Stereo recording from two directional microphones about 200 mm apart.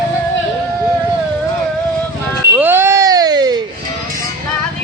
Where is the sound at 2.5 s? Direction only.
10° right (ahead or behind).